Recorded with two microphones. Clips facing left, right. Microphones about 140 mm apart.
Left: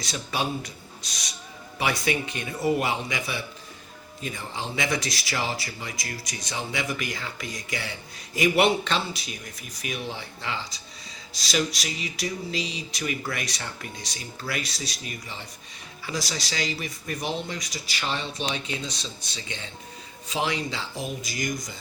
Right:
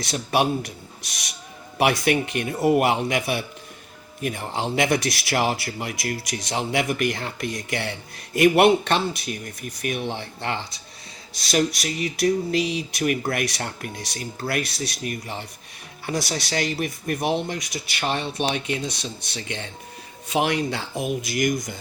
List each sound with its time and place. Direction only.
0.0 s speech: 60° right (ahead or behind)